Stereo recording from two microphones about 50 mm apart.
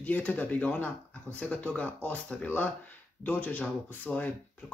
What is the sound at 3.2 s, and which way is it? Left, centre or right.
Speech, left.